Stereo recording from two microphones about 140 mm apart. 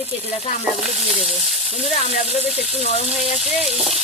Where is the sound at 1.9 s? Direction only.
50° left (ahead or behind).